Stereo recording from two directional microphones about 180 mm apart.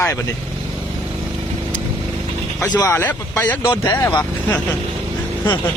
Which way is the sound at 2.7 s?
15° left (ahead or behind).